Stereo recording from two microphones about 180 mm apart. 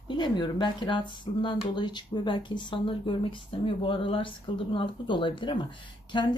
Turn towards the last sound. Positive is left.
turn(degrees=25)  # may be behind; listen again after turning